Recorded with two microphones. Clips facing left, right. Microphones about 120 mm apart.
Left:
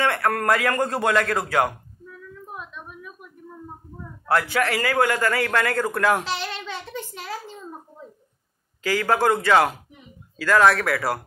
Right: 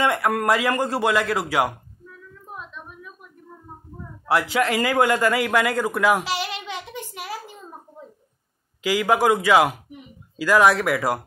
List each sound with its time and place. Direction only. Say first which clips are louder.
0.0 s a man's voice: right 1 dB; 15° right (ahead or behind)
4.3 s a man's voice: right 1 dB; 15° right (ahead or behind)
8.8 s a man's voice: right 1 dB; 15° right (ahead or behind)